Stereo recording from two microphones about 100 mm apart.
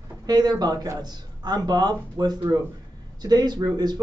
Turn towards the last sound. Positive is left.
turn(degrees=-45)  # may be behind; listen again after turning